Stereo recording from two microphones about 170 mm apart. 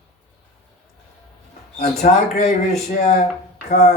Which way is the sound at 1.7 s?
40° left (ahead or behind).